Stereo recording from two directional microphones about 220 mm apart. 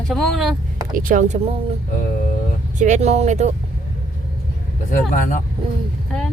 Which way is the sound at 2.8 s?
30° right (ahead or behind).